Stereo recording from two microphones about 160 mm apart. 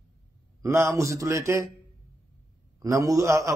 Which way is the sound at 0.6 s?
20° right (ahead or behind).